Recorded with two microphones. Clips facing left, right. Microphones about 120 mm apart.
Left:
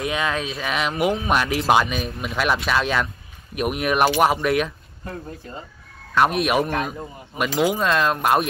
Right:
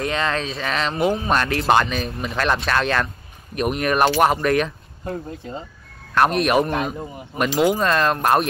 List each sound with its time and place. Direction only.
0.0 s speech: 10° left (ahead or behind)
5.0 s speech: 25° right (ahead or behind)
6.1 s speech: centre (ahead or behind)